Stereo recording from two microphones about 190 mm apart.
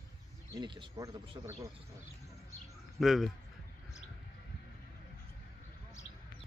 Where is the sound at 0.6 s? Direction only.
25° right (ahead or behind).